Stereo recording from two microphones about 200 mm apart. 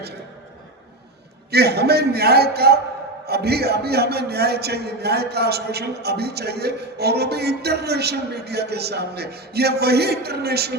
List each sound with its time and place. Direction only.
1.5 s a man's voice: 55° right (ahead or behind)